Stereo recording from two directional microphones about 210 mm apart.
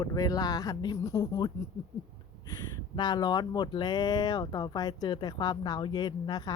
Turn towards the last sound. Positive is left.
turn(degrees=20)  # may be behind; listen again after turning